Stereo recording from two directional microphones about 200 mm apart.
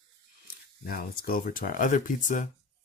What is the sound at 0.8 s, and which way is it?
Speech, 50° left (ahead or behind).